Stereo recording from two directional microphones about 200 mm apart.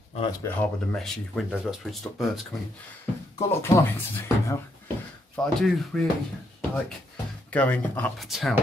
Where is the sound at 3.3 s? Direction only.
15° left (ahead or behind).